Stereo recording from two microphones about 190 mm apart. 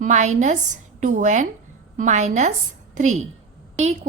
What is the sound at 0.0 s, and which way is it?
A woman's voice, 40° right (ahead or behind).